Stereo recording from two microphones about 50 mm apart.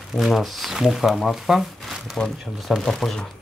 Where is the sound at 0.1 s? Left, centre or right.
Centre.